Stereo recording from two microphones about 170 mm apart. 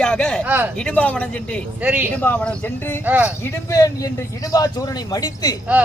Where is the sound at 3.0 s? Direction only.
10° right (ahead or behind).